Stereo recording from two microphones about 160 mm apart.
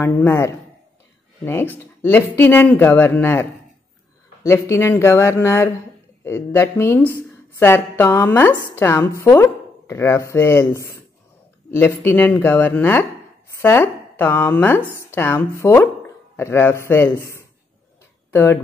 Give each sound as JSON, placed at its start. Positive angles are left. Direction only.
{"t": 0.0, "sound": "a woman's voice", "side_deg": 15}